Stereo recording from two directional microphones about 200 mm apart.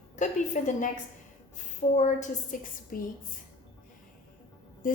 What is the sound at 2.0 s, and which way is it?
A woman's voice, 35° left (ahead or behind).